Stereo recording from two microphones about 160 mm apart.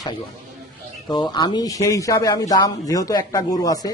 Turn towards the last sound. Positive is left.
turn(degrees=25)  # may be behind; listen again after turning